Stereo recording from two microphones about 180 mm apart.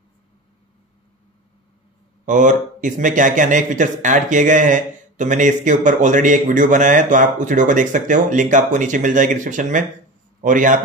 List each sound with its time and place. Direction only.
2.2 s speech: 45° right (ahead or behind)